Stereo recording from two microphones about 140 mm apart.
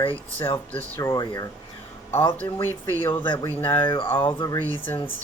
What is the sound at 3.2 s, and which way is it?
Speech, 35° left (ahead or behind).